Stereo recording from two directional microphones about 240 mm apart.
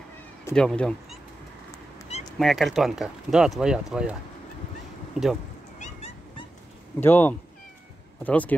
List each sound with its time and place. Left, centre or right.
0.6 s speech: centre
2.3 s speech: centre
5.8 s dog: left
7.0 s speech: centre